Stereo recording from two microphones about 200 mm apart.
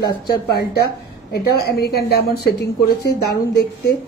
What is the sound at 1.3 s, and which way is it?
A woman's voice, 50° left (ahead or behind).